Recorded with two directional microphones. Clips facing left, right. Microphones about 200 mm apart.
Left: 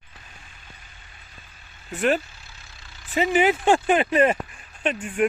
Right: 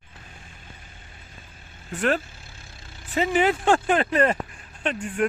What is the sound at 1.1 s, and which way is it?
Vehicle, 45° right (ahead or behind).